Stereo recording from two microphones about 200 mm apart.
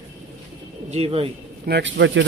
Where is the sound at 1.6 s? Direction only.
60° right (ahead or behind).